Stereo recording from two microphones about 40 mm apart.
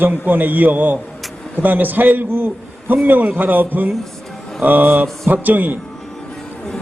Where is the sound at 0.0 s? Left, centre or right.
Right.